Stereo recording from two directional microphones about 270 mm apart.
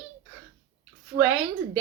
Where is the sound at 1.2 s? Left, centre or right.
Centre.